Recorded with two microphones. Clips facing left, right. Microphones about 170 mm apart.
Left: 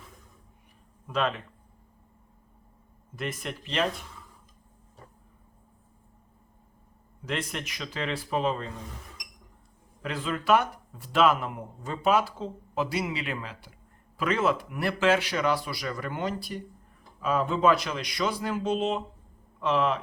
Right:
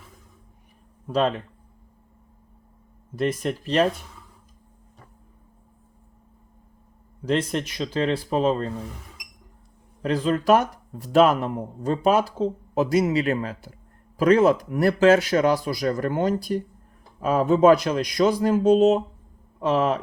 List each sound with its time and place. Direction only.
1.0 s speech: 35° right (ahead or behind)
3.2 s speech: 35° right (ahead or behind)
7.3 s speech: 35° right (ahead or behind)
10.0 s speech: 40° right (ahead or behind)